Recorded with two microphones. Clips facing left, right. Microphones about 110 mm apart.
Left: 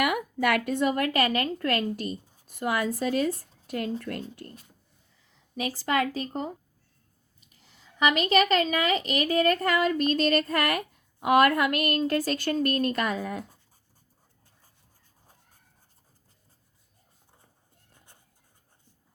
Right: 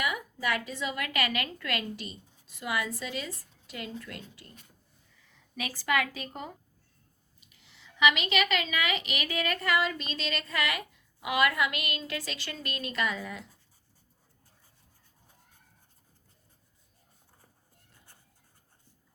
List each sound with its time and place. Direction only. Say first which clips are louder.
0.0 s a woman's voice: left 7 dB; 60° left (ahead or behind); by 4.6 s 45° left (ahead or behind)
5.5 s a woman's voice: left 3 dB; 30° left (ahead or behind); by 13.6 s 45° left (ahead or behind)